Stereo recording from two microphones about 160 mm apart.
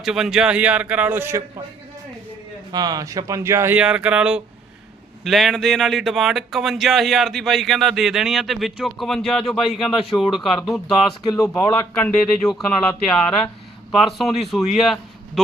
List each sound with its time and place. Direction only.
0.0 s speech: centre (ahead or behind)
2.7 s speech: 25° right (ahead or behind); by 11.0 s centre (ahead or behind)
11.2 s speech: 20° left (ahead or behind)
11.9 s speech: 5° left (ahead or behind)